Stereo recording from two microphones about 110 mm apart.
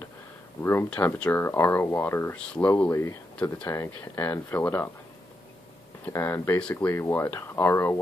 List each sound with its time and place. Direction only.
0.6 s speech: 20° left (ahead or behind)
2.3 s speech: 10° left (ahead or behind)
2.9 s speech: 25° left (ahead or behind)
6.0 s speech: 25° left (ahead or behind)